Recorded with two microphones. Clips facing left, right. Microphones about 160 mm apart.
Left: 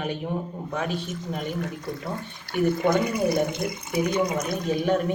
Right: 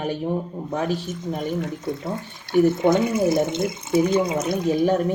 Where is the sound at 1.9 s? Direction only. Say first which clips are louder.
Right 4 dB; 20° right (ahead or behind).